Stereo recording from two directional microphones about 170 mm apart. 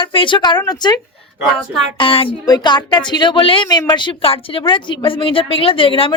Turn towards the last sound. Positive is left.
turn(degrees=30)  # may be behind; listen again after turning